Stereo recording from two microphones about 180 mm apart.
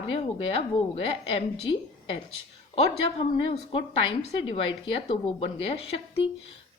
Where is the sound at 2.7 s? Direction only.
30° left (ahead or behind).